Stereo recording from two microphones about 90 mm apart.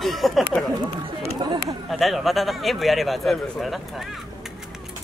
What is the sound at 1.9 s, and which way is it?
A man's voice, centre (ahead or behind).